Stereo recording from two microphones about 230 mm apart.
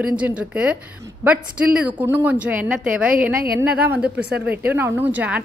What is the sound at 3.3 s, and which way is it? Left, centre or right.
Speech, right.